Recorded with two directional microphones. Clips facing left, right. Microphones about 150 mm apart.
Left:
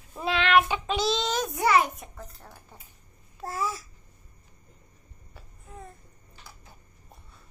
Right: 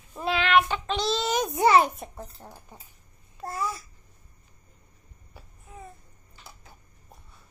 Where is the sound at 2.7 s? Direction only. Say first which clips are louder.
Right 2 dB; 15° right (ahead or behind).